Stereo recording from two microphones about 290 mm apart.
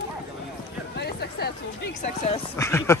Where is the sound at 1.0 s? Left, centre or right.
Left.